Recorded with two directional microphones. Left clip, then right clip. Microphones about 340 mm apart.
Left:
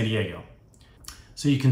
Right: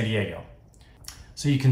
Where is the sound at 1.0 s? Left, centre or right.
Centre.